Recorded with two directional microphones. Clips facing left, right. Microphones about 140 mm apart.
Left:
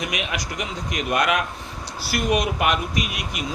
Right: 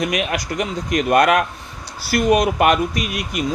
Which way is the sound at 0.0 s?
45° right (ahead or behind).